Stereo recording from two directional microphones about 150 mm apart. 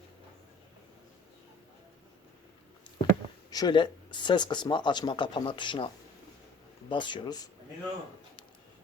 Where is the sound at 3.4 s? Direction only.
25° left (ahead or behind).